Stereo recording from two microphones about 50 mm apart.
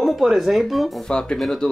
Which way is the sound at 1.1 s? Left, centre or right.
Centre.